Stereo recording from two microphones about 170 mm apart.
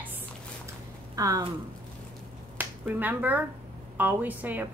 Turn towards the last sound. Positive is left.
turn(degrees=-10)  # may be behind; listen again after turning